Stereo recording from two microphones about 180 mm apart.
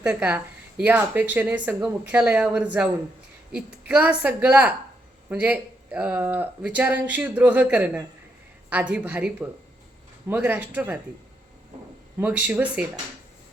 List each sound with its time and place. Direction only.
0.0 s a woman's voice: 5° right (ahead or behind)
12.2 s a woman's voice: 10° right (ahead or behind)